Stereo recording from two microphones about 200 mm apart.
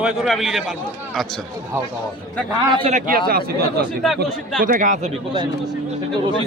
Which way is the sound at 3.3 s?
50° right (ahead or behind).